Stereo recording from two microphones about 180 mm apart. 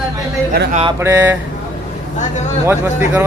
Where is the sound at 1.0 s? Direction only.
10° right (ahead or behind).